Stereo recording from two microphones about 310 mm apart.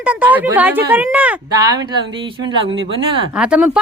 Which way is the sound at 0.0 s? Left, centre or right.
Centre.